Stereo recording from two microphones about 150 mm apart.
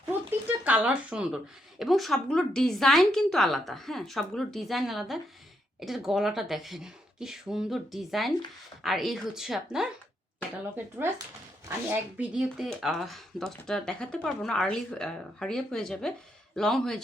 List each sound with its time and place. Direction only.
0.0 s a sound: 15° right (ahead or behind)
1.8 s speech: centre (ahead or behind)
11.0 s speech: 15° right (ahead or behind); by 17.0 s 5° left (ahead or behind)